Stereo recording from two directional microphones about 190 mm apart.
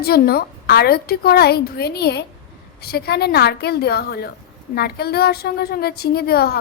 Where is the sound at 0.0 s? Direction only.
55° left (ahead or behind).